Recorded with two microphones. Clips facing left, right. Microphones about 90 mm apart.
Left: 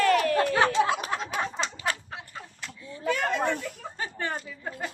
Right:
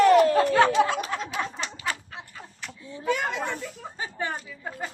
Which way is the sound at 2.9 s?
15° right (ahead or behind).